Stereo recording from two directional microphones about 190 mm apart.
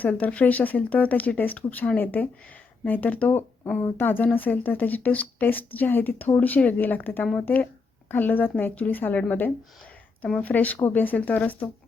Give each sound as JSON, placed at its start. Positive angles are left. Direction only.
{"t": 0.0, "sound": "speech", "side_deg": 10}